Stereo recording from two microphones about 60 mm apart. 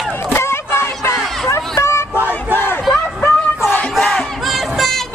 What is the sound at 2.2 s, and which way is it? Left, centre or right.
Crowd, left.